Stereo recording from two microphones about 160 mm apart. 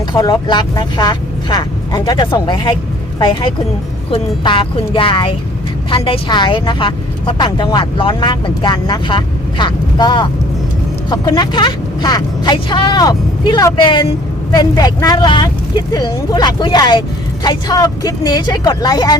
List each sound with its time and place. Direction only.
0.1 s speech: 25° left (ahead or behind)
4.1 s speech: 35° left (ahead or behind)